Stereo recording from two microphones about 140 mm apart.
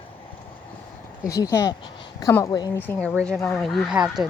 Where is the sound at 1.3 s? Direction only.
25° left (ahead or behind).